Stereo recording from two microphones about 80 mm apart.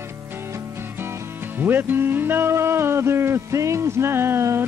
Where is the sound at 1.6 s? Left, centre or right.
Right.